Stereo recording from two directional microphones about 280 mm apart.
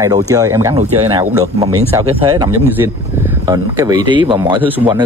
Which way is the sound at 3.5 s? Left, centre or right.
Centre.